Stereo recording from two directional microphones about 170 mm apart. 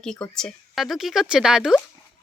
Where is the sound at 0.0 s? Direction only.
5° left (ahead or behind).